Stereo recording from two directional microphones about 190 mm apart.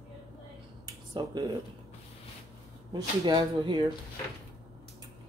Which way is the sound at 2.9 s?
25° right (ahead or behind).